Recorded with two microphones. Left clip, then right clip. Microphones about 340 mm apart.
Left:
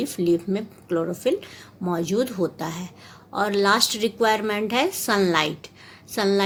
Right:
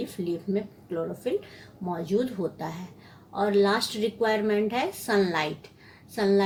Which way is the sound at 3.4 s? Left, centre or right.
Left.